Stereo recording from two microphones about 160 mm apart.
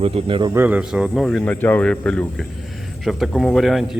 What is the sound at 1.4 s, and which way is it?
Speech, 10° left (ahead or behind).